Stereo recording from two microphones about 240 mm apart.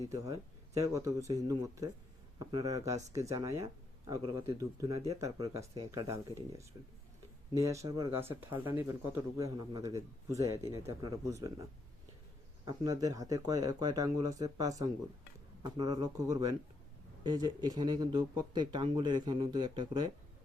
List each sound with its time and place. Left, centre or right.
0.1 s speech: centre
12.6 s speech: centre